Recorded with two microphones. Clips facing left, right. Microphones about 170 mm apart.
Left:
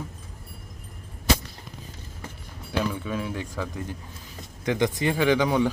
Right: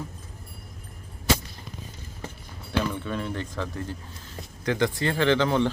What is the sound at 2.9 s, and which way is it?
Speech, 5° left (ahead or behind).